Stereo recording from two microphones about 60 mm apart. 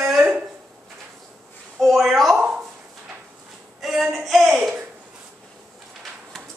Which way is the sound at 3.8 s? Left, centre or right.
Centre.